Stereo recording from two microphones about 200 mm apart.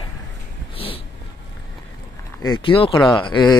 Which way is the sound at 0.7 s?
30° left (ahead or behind).